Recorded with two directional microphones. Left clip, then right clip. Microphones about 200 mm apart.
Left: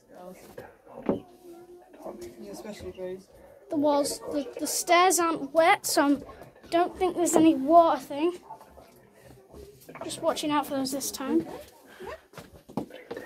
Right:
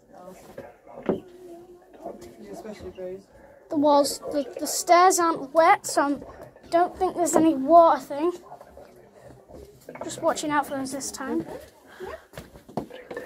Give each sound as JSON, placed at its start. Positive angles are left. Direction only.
{"t": 3.6, "sound": "a woman's voice", "side_deg": 5}
{"t": 5.8, "sound": "a woman's voice", "side_deg": 25}
{"t": 10.0, "sound": "a woman's voice", "side_deg": 0}
{"t": 10.6, "sound": "a woman's voice", "side_deg": 20}